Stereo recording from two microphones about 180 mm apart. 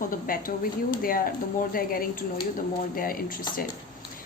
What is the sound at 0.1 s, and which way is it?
A woman's voice, 50° left (ahead or behind).